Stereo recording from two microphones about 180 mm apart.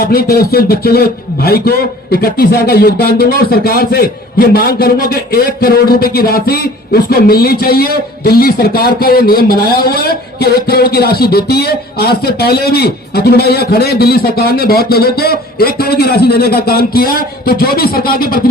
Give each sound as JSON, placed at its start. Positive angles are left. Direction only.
{"t": 0.0, "sound": "speech", "side_deg": 60}